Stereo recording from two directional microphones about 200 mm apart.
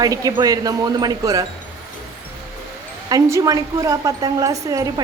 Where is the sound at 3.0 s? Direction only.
15° right (ahead or behind).